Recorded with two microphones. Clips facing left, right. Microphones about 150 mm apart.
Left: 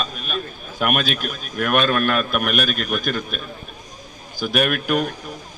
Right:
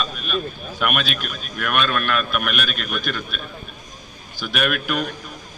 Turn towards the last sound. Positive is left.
turn(degrees=40)  # may be behind; listen again after turning